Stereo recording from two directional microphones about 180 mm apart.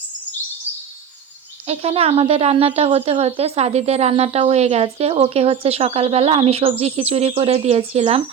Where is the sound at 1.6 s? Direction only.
35° right (ahead or behind).